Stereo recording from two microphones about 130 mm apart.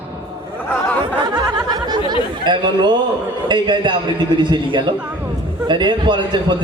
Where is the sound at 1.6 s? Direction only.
35° right (ahead or behind).